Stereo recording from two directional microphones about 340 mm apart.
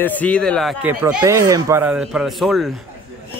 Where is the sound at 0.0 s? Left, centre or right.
Centre.